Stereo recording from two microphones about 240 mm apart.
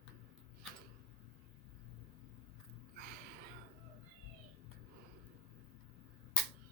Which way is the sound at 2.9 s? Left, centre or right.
Right.